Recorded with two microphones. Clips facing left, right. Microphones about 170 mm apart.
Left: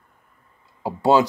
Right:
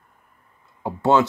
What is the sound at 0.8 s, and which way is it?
Speech, 10° left (ahead or behind).